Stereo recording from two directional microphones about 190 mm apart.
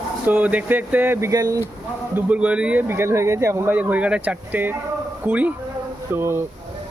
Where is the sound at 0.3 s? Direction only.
10° right (ahead or behind).